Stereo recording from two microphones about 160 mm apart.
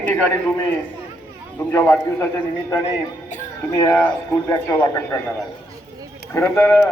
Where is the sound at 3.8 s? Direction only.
10° left (ahead or behind).